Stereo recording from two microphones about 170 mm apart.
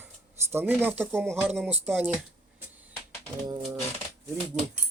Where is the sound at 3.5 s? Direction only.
25° right (ahead or behind).